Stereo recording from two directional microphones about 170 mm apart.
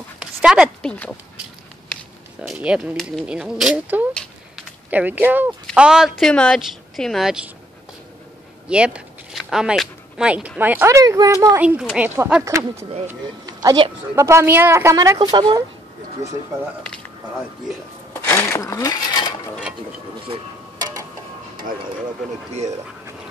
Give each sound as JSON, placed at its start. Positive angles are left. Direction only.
{"t": 0.2, "sound": "a sound", "side_deg": -5}
{"t": 2.4, "sound": "a woman's voice", "side_deg": -5}
{"t": 8.6, "sound": "speech", "side_deg": -5}
{"t": 11.6, "sound": "a woman's voice", "side_deg": -5}
{"t": 18.1, "sound": "dishes", "side_deg": 15}